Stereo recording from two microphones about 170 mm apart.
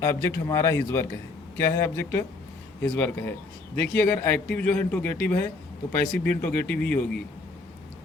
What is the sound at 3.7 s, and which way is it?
Speech, 10° left (ahead or behind).